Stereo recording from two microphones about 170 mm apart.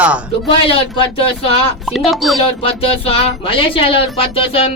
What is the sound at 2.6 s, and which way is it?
Speech, 35° left (ahead or behind).